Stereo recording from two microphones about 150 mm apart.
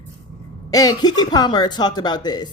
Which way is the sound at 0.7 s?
25° left (ahead or behind).